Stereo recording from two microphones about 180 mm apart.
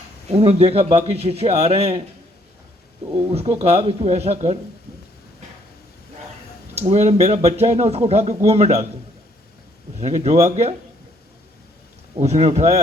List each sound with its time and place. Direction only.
0.3 s speech: 35° right (ahead or behind)
3.1 s speech: 35° right (ahead or behind)
6.7 s speech: 40° right (ahead or behind)
10.0 s speech: 40° right (ahead or behind)
12.1 s speech: 35° right (ahead or behind)